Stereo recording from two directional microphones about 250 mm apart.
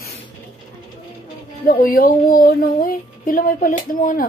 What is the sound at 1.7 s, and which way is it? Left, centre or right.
Speech, left.